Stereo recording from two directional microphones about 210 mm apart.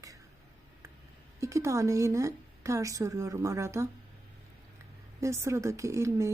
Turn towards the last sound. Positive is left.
turn(degrees=-15)  # may be behind; listen again after turning